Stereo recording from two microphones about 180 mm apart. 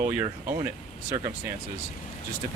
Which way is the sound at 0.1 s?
10° right (ahead or behind).